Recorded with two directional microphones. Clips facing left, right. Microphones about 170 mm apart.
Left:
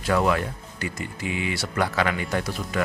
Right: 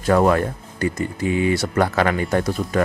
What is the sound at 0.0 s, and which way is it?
Speech, 45° right (ahead or behind).